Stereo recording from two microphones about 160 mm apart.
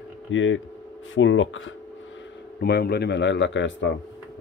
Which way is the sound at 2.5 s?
85° left.